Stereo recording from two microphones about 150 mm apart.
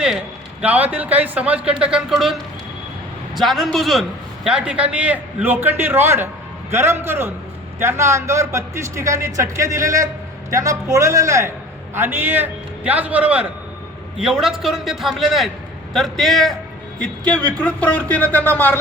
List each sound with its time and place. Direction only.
0.6 s a man's voice: 10° right (ahead or behind)
3.3 s a man's voice: centre (ahead or behind)